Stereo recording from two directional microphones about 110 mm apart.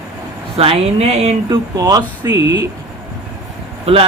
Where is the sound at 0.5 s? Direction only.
65° right (ahead or behind).